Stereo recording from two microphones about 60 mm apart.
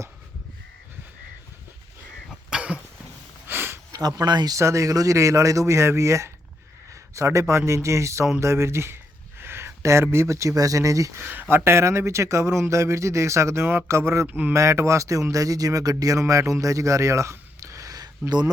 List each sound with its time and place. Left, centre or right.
2.3 s throat clearing: centre
3.4 s a sound: right
3.9 s speech: right
4.6 s speech: right
11.2 s speech: right
14.3 s speech: right
14.5 s speech: right
16.2 s speech: right